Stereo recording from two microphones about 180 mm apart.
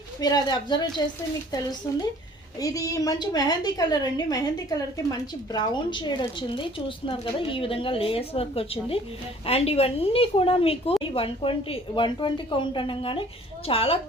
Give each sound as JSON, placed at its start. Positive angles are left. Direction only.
{"t": 0.2, "sound": "a woman's voice", "side_deg": 20}
{"t": 2.6, "sound": "a woman's voice", "side_deg": 20}